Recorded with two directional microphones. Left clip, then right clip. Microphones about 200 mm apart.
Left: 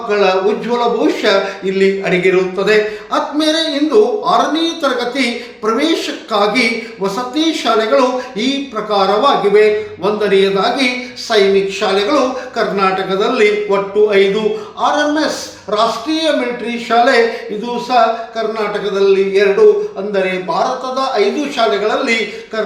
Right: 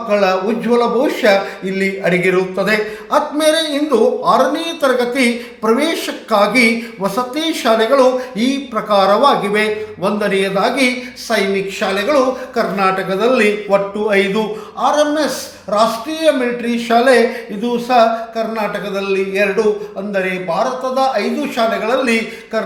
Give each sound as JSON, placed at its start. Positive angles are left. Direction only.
{"t": 0.1, "sound": "a woman's voice", "side_deg": -35}